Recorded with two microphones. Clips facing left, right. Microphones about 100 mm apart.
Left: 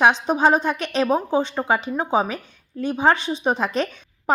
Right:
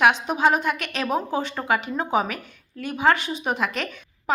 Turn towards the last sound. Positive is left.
turn(degrees=30)  # may be behind; listen again after turning